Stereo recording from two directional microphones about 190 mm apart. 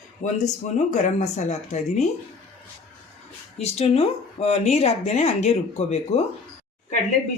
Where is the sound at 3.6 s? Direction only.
35° left (ahead or behind).